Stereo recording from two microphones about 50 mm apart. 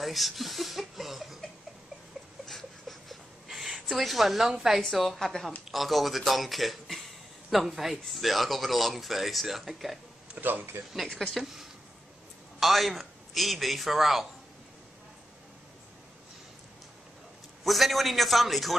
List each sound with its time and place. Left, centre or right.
0.0 s speech: centre
2.4 s pant: centre
3.4 s a sound: centre
3.9 s speech: centre
10.3 s speech: right
11.3 s a man's voice: centre
17.6 s speech: centre